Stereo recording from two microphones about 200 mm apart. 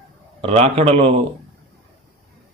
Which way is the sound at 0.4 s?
30° right (ahead or behind).